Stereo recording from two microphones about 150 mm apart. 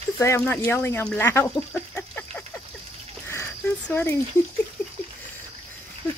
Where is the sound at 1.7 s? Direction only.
10° left (ahead or behind).